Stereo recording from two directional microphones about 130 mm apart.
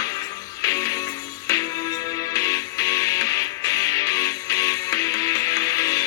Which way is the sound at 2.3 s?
25° left (ahead or behind).